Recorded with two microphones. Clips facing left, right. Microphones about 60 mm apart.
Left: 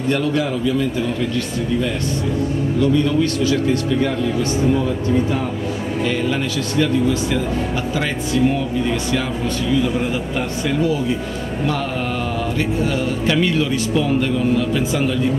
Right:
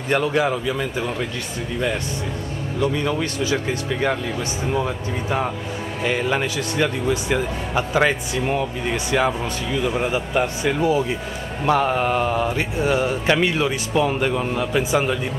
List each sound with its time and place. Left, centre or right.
0.1 s speech: right
2.8 s speech: right
6.0 s speech: right